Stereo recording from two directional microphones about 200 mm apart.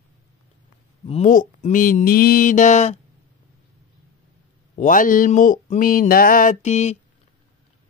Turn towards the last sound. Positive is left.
turn(degrees=35)  # may be behind; listen again after turning